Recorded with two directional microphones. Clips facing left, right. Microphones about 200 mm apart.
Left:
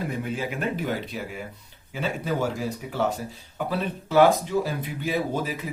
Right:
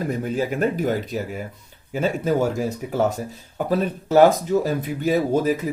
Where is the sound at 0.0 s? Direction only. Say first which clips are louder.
Right 5 dB; 40° right (ahead or behind).